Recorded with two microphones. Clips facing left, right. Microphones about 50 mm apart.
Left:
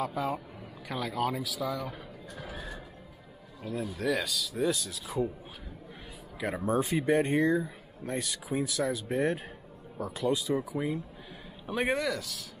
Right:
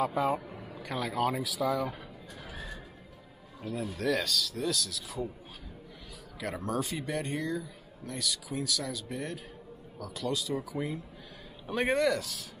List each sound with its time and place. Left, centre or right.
0.0 s speech: centre
2.3 s neigh: centre
3.6 s speech: centre
4.6 s speech: left
6.4 s speech: centre